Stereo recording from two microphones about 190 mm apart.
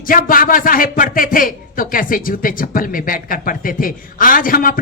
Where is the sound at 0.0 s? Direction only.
45° left (ahead or behind).